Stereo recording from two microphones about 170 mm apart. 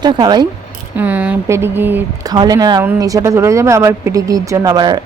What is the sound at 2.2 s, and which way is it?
A woman's voice, 25° right (ahead or behind).